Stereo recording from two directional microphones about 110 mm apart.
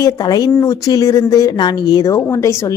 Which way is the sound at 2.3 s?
25° left (ahead or behind).